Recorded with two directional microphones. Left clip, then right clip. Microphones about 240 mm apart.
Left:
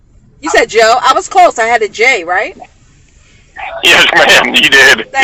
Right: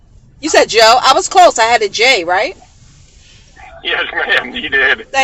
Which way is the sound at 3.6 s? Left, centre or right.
Left.